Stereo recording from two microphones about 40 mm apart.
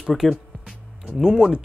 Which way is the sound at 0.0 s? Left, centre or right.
Centre.